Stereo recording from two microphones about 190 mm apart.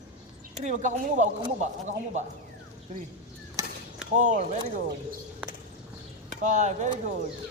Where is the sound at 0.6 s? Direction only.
40° right (ahead or behind).